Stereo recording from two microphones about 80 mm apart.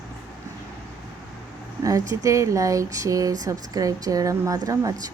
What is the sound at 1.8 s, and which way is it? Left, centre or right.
A woman's voice, right.